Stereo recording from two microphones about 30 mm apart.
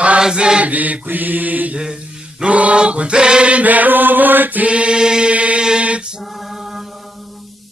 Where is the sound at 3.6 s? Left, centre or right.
Right.